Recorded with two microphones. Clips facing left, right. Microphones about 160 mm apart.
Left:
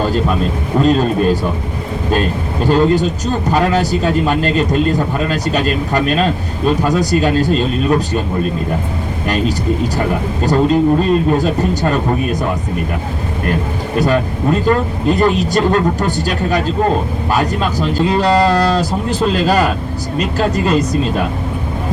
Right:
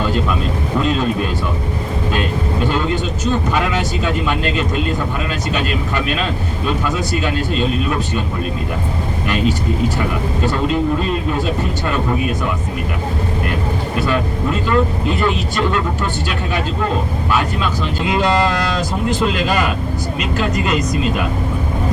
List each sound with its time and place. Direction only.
0.0 s a sound: 40° left (ahead or behind)
0.8 s speech: 40° left (ahead or behind)
2.6 s speech: 40° left (ahead or behind)
9.2 s speech: 40° left (ahead or behind)
14.0 s speech: 40° left (ahead or behind)